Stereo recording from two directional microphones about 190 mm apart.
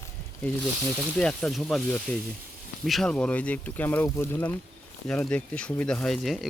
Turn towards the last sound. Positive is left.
turn(degrees=0)  # may be behind; listen again after turning